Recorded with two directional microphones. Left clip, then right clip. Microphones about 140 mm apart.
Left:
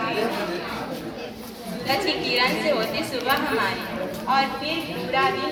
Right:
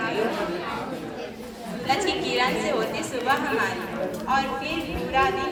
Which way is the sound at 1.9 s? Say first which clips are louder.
Left 1 dB; 40° left (ahead or behind).